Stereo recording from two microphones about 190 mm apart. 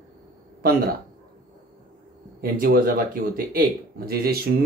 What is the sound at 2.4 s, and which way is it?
Speech, 50° right (ahead or behind).